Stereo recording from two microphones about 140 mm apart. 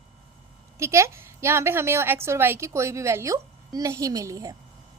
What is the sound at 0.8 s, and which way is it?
A woman's voice, 20° right (ahead or behind).